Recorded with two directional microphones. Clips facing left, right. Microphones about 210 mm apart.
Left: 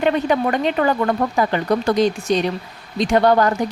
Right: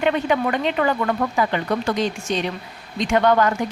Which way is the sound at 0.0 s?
40° left (ahead or behind).